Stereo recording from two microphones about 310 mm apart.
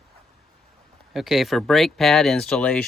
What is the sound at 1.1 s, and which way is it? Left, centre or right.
Speech, centre.